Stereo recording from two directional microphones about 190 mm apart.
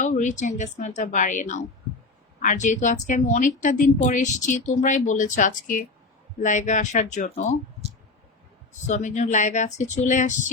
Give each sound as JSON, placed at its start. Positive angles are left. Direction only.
{"t": 0.0, "sound": "a woman's voice", "side_deg": 40}
{"t": 8.9, "sound": "a woman's voice", "side_deg": 40}